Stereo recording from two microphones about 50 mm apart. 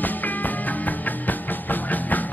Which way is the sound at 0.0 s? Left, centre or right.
Left.